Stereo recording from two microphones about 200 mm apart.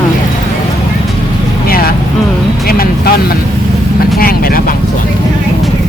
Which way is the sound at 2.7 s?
50° left (ahead or behind).